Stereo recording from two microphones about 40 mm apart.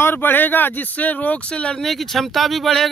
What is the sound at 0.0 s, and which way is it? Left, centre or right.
Speech, left.